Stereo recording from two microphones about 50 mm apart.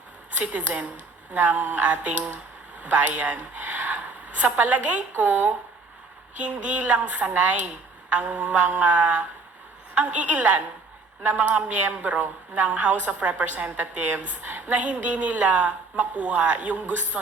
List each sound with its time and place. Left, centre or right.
0.3 s a woman's voice: right